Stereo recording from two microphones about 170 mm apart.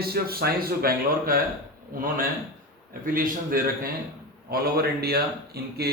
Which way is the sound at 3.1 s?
55° right (ahead or behind).